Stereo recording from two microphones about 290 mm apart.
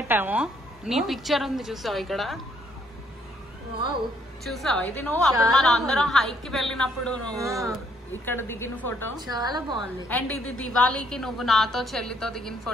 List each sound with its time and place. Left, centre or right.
0.1 s speech: centre
4.5 s speech: centre
7.3 s a woman's voice: centre
7.6 s a woman's voice: centre
9.1 s a woman's voice: centre
10.0 s speech: centre
10.3 s a woman's voice: left
10.7 s speech: centre